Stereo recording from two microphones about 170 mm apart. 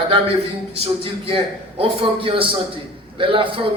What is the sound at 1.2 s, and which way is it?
A man's voice, 35° right (ahead or behind).